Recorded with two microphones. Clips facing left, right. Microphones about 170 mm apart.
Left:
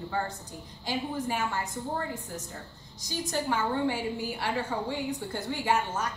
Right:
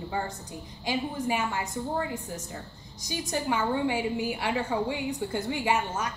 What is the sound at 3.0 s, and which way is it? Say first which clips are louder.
A woman's voice: right 1 dB; 15° right (ahead or behind).